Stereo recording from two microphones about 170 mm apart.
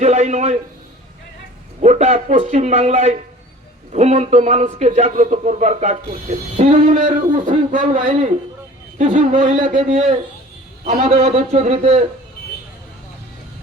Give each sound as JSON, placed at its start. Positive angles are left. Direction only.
{"t": 0.0, "sound": "a man's voice", "side_deg": -40}
{"t": 1.8, "sound": "a man's voice", "side_deg": -40}
{"t": 11.2, "sound": "a man's voice", "side_deg": -40}